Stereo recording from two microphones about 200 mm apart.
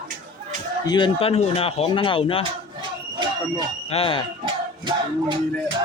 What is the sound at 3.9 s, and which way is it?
Speech, 30° left (ahead or behind).